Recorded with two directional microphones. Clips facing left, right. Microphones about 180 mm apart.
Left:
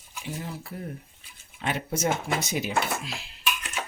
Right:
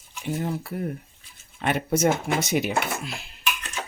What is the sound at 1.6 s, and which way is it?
Speech, 65° right (ahead or behind).